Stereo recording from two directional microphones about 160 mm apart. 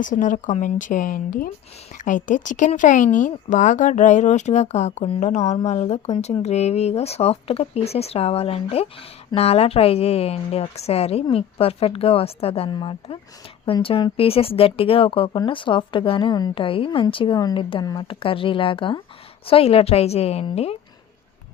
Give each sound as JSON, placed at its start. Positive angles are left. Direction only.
{"t": 0.0, "sound": "speech", "side_deg": 55}